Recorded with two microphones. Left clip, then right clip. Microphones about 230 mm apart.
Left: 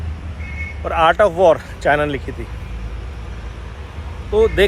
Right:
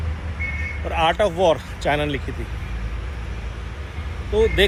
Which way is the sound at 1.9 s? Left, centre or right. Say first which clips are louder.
Left 5 dB; left.